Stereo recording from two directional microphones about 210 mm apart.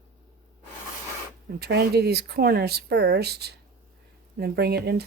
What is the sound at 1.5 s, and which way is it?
Speech, 50° right (ahead or behind).